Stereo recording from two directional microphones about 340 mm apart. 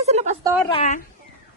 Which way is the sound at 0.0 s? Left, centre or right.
Centre.